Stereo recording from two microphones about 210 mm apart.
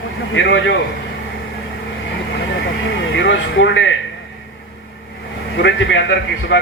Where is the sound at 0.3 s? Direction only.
60° left (ahead or behind).